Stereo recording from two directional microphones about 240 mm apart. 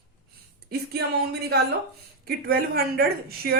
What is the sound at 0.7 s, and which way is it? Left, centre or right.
Speech, right.